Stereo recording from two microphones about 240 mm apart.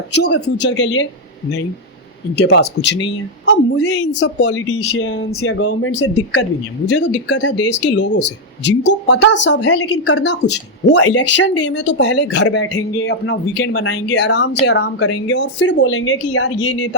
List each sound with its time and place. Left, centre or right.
0.3 s a woman's voice: left
2.4 s a woman's voice: left
4.6 s a woman's voice: left
12.7 s a woman's voice: left
15.8 s speech: left
16.6 s a woman's voice: left